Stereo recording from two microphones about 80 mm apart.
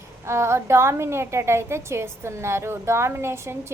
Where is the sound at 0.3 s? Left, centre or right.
Right.